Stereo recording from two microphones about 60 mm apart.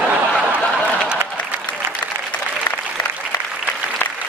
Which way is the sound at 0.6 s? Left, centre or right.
Centre.